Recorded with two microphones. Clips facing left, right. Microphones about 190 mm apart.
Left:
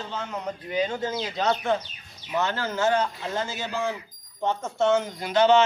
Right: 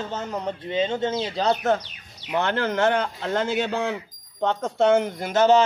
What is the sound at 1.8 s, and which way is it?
Speech, 65° right (ahead or behind).